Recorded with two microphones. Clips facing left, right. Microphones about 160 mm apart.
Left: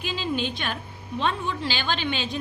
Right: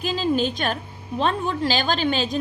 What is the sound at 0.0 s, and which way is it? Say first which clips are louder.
A woman's voice: right 6 dB; 40° right (ahead or behind).